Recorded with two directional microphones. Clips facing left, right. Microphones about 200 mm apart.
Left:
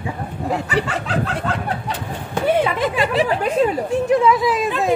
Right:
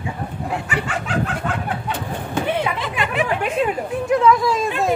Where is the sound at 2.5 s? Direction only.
45° left (ahead or behind).